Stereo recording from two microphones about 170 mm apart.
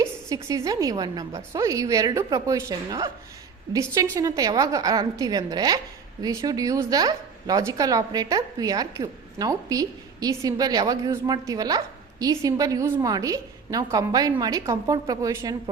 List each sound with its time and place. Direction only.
0.0 s a woman's voice: 20° right (ahead or behind)